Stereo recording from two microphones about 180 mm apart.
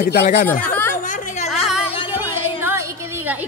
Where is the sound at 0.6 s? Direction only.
10° left (ahead or behind).